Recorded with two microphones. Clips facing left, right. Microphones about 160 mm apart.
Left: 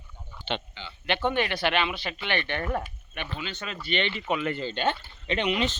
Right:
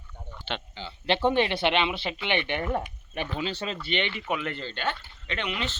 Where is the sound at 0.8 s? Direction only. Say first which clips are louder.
Right 5 dB; 30° right (ahead or behind); by 2.9 s 15° right (ahead or behind).